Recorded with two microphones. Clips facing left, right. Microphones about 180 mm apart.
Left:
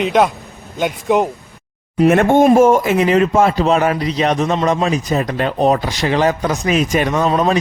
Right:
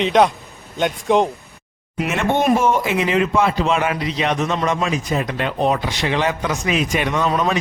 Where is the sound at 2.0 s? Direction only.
50° left (ahead or behind).